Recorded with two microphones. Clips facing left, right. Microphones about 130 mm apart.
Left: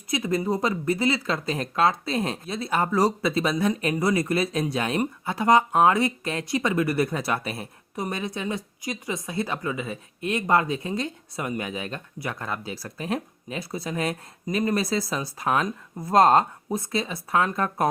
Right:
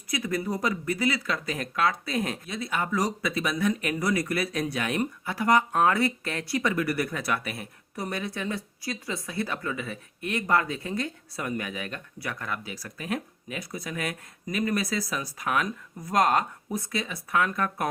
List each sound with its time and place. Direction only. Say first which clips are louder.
0.1 s speech: left 4 dB; 25° left (ahead or behind)